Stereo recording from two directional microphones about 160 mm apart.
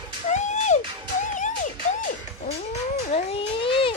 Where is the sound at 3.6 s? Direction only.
35° left (ahead or behind).